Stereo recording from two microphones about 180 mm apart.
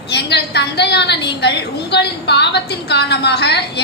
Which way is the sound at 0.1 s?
70° left (ahead or behind).